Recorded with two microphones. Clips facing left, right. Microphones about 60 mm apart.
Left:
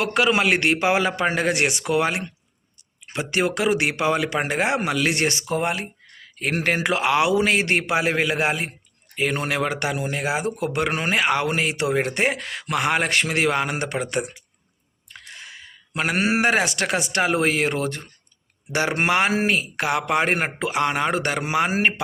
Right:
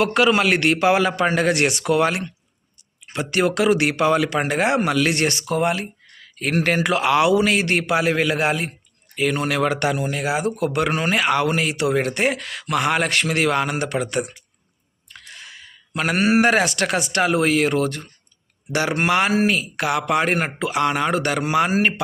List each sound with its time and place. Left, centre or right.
0.0 s speech: centre
9.1 s speech: left
9.6 s speech: centre
10.1 s speech: left
15.1 s a sound: left
16.1 s speech: centre